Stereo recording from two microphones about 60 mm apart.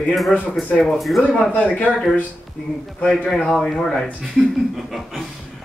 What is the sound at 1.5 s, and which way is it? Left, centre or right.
Speech, left.